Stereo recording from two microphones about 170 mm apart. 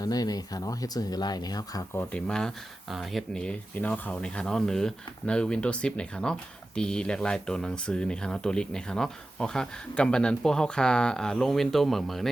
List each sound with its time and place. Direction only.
0.0 s speech: 20° left (ahead or behind); by 12.3 s centre (ahead or behind)